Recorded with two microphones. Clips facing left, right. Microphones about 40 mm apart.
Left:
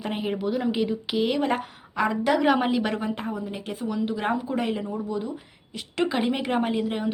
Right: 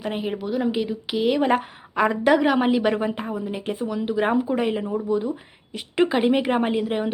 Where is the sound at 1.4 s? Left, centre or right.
Centre.